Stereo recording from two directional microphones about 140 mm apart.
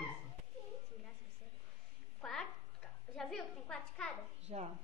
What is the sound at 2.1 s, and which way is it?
A child's voice, 5° left (ahead or behind).